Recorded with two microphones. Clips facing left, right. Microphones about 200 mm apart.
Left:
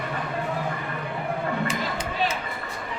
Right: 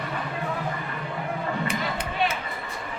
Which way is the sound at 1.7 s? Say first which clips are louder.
Even; 60° right (ahead or behind).